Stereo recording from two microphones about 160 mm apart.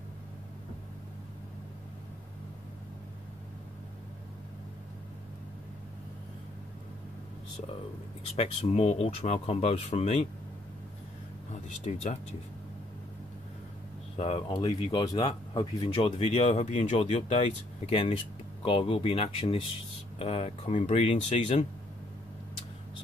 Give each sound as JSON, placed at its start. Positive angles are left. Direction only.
{"t": 8.4, "sound": "speech", "side_deg": 40}
{"t": 11.5, "sound": "speech", "side_deg": 45}
{"t": 14.1, "sound": "speech", "side_deg": 35}